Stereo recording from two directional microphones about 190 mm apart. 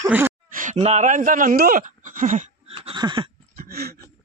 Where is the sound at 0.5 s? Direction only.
40° right (ahead or behind).